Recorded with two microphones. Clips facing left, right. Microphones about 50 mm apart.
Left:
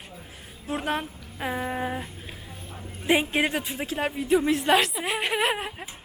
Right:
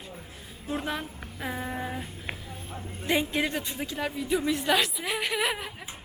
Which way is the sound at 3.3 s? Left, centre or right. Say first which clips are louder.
Left 3 dB; left.